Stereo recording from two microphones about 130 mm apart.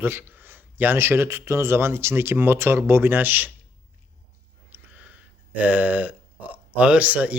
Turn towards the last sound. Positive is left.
turn(degrees=-10)  # may be behind; listen again after turning